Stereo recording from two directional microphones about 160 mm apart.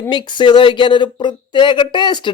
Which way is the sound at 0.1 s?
30° left (ahead or behind).